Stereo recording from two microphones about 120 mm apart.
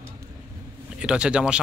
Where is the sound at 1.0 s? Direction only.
5° right (ahead or behind).